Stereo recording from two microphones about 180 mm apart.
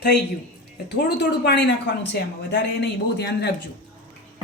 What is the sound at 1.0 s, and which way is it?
A woman's voice, 65° left (ahead or behind).